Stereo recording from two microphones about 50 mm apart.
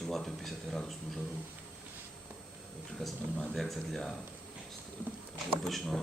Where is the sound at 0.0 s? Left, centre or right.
Centre.